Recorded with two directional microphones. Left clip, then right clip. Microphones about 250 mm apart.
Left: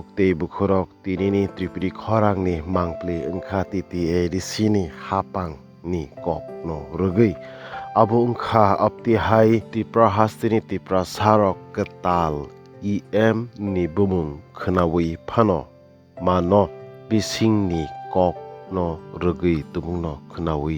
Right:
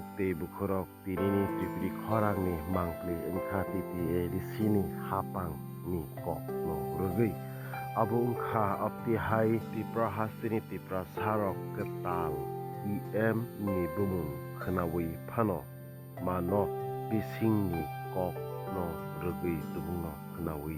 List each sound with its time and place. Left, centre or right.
0.2 s speech: left